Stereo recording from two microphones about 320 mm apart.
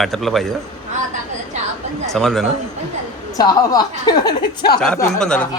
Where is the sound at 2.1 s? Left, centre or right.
Centre.